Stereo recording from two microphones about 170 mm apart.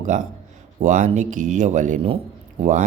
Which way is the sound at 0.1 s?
50° right (ahead or behind).